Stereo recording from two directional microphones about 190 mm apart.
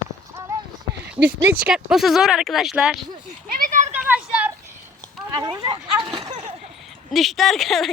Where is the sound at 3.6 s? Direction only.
40° right (ahead or behind).